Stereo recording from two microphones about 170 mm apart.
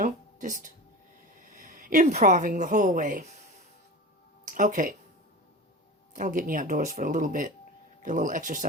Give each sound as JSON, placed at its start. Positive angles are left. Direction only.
{"t": 0.0, "sound": "a sound", "side_deg": -50}
{"t": 1.4, "sound": "speech", "side_deg": -50}
{"t": 4.4, "sound": "speech", "side_deg": -50}
{"t": 6.1, "sound": "speech", "side_deg": -50}